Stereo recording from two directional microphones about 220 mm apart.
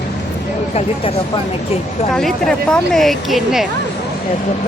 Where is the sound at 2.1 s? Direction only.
Centre (ahead or behind).